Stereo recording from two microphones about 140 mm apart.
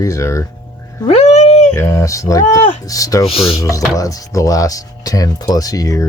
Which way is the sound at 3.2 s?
45° left (ahead or behind).